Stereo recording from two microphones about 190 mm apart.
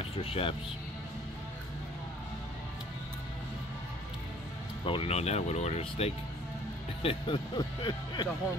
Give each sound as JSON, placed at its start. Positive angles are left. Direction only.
{"t": 0.0, "sound": "speech", "side_deg": 30}
{"t": 4.8, "sound": "speech", "side_deg": 30}